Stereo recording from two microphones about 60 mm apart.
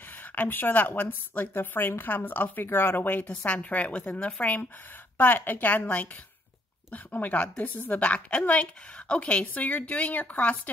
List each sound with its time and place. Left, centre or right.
0.4 s a woman's voice: left